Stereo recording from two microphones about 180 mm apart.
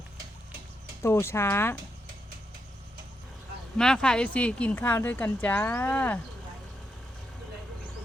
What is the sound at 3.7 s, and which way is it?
Speech, 5° left (ahead or behind).